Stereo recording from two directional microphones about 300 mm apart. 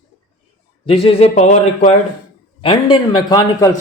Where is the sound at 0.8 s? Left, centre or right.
Centre.